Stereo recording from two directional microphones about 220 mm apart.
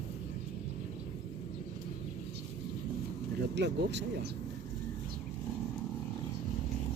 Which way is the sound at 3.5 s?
50° right (ahead or behind).